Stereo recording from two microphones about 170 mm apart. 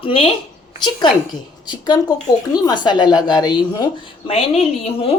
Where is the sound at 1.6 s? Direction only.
25° left (ahead or behind).